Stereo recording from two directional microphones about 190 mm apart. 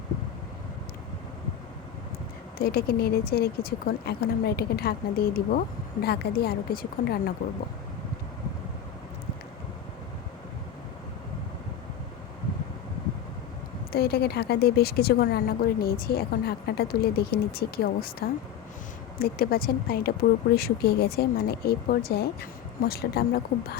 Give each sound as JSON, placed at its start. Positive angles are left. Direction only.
{"t": 2.6, "sound": "speech", "side_deg": 55}
{"t": 13.9, "sound": "speech", "side_deg": 55}